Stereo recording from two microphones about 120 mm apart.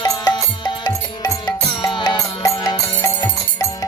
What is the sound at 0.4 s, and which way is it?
Music, 30° left (ahead or behind).